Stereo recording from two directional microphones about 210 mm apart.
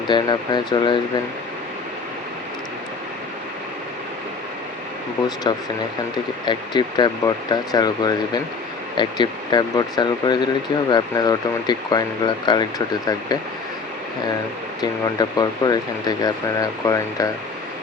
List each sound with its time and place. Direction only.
0.1 s speech: 20° left (ahead or behind)
5.5 s speech: 20° left (ahead or behind)
14.8 s speech: 20° left (ahead or behind)